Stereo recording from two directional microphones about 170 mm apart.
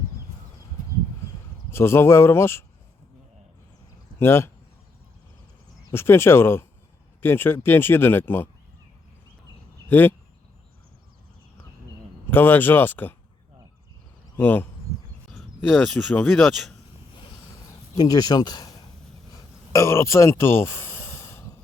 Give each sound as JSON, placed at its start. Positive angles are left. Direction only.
{"t": 1.7, "sound": "speech", "side_deg": 15}
{"t": 4.2, "sound": "speech", "side_deg": 15}
{"t": 5.8, "sound": "speech", "side_deg": 15}
{"t": 9.9, "sound": "speech", "side_deg": 10}
{"t": 12.3, "sound": "speech", "side_deg": 10}
{"t": 14.3, "sound": "speech", "side_deg": 10}
{"t": 17.5, "sound": "a sound", "side_deg": 20}